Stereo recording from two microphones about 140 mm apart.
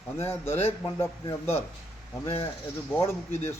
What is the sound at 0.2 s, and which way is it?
A man's voice, 15° left (ahead or behind).